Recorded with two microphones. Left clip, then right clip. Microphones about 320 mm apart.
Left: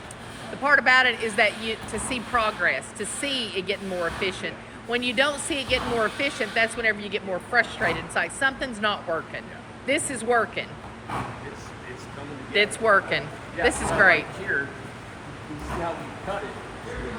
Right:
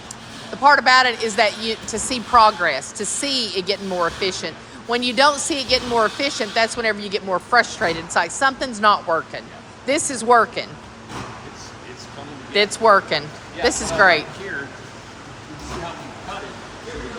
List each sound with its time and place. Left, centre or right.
0.6 s speech: centre
12.5 s speech: centre